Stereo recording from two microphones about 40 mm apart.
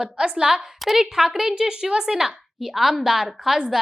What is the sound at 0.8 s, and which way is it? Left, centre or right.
A woman's voice, centre.